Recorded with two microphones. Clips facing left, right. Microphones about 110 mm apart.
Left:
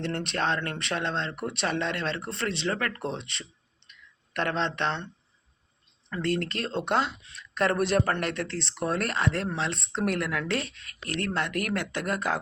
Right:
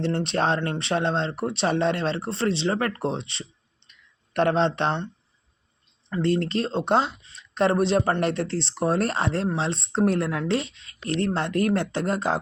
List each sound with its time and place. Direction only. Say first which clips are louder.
0.0 s speech: right 5 dB; 30° right (ahead or behind)
6.2 s speech: right 5 dB; 30° right (ahead or behind)
8.2 s speech: right 6 dB; 35° right (ahead or behind)